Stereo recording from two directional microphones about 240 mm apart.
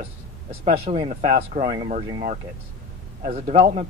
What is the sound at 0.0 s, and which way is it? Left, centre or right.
A man's voice, right.